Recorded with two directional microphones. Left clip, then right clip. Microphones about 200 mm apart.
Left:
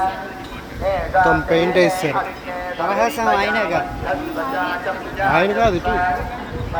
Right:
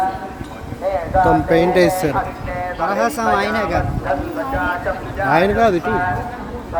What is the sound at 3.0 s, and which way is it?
Speech, 60° right (ahead or behind).